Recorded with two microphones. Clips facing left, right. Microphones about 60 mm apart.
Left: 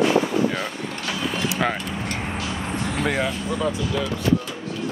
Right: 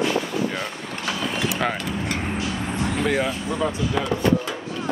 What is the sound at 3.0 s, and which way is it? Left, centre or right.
Speech, centre.